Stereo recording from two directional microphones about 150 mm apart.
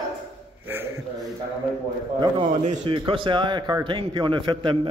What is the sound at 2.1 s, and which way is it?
A man's voice, 30° right (ahead or behind).